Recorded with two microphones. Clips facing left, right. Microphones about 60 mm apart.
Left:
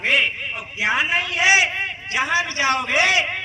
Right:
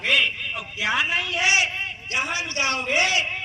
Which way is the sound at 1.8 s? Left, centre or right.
Left.